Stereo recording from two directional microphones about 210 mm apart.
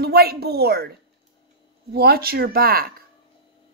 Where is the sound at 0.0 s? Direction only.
45° right (ahead or behind).